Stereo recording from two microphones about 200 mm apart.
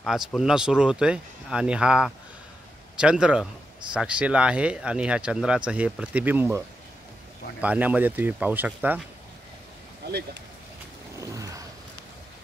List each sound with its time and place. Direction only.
0.0 s speech: centre (ahead or behind)
7.6 s speech: 5° right (ahead or behind)
10.0 s speech: 55° right (ahead or behind)
11.1 s vehicle: 15° right (ahead or behind)